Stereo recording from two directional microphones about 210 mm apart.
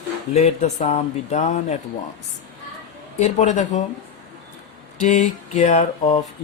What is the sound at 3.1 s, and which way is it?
Speech, 35° left (ahead or behind).